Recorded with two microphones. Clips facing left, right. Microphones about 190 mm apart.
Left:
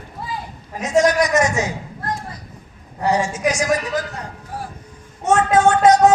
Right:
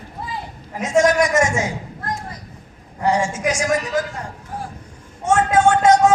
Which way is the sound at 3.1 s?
25° right (ahead or behind).